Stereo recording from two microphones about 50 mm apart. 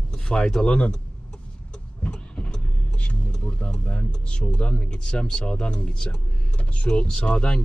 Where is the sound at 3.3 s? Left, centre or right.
Centre.